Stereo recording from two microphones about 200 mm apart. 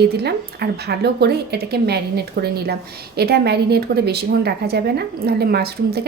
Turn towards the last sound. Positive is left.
turn(degrees=-50)  # may be behind; listen again after turning